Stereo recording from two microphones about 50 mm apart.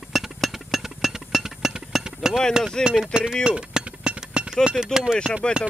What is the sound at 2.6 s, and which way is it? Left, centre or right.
Speech, centre.